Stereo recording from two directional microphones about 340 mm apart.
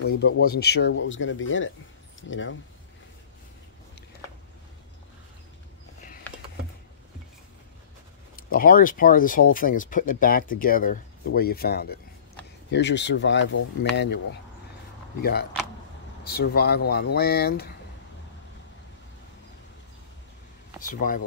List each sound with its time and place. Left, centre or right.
0.1 s speech: left
8.5 s speech: left
16.3 s speech: left
20.8 s speech: left